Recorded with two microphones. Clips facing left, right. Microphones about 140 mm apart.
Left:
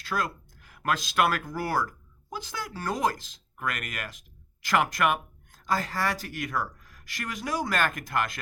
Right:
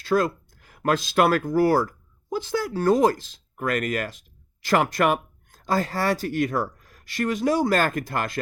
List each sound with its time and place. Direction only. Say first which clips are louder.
0.0 s speech: right 9 dB; 30° right (ahead or behind)